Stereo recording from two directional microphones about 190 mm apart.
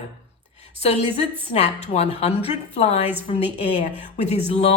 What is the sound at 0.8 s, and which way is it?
A woman's voice, 35° left (ahead or behind).